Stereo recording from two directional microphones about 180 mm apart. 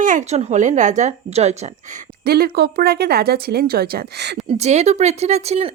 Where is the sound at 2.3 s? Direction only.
60° right (ahead or behind).